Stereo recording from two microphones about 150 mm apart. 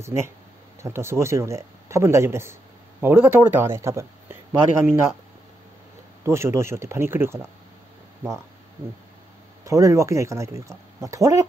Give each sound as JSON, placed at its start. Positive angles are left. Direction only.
{"t": 0.0, "sound": "speech", "side_deg": -20}
{"t": 6.2, "sound": "speech", "side_deg": -20}
{"t": 9.7, "sound": "speech", "side_deg": -20}